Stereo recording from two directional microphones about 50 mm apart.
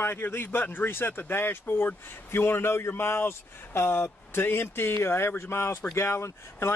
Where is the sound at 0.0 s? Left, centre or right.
Left.